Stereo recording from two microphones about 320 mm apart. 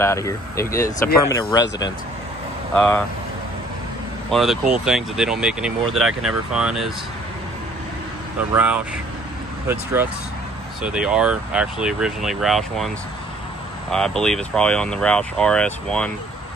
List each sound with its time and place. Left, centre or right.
0.0 s speech: centre
4.3 s speech: centre
8.5 s speech: centre
10.8 s speech: centre